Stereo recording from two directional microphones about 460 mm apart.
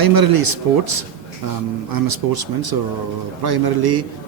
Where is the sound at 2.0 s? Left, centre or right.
Right.